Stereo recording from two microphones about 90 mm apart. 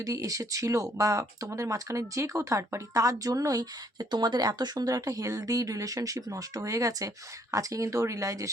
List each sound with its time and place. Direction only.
0.0 s speech: 40° right (ahead or behind)